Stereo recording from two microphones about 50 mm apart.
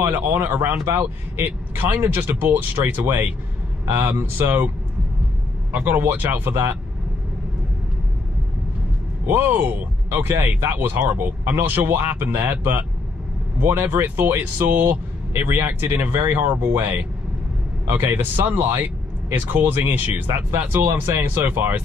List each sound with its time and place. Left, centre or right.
0.0 s speech: right
5.9 s speech: right
9.2 s speech: right
10.0 s speech: right
15.9 s speech: right